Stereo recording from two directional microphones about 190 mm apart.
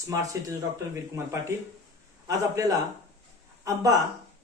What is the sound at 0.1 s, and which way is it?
Speech, 15° right (ahead or behind).